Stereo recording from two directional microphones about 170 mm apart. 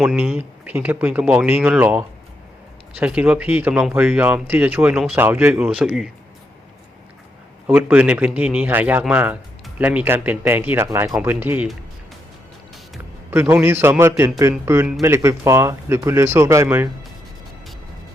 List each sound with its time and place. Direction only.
0.0 s speech: 5° right (ahead or behind)
7.7 s speech: 10° right (ahead or behind)
13.3 s speech: 10° right (ahead or behind)